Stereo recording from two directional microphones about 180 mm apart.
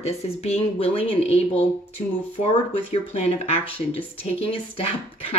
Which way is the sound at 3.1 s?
35° left (ahead or behind).